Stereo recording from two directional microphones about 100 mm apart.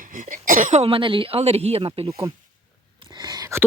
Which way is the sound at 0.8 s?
65° right (ahead or behind).